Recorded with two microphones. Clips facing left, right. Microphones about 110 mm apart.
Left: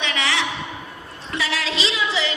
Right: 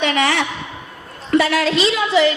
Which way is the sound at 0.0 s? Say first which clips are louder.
Right 7 dB; 50° right (ahead or behind).